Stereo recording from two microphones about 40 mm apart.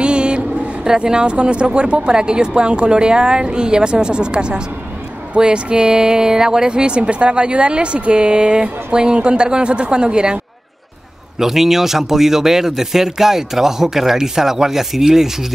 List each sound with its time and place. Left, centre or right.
0.0 s a sound: right
0.8 s speech: centre
11.3 s speech: centre